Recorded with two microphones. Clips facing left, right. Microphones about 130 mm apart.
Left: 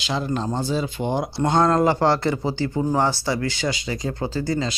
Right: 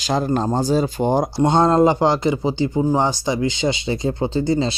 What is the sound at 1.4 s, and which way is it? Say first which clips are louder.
Speech: right 3 dB; 25° right (ahead or behind).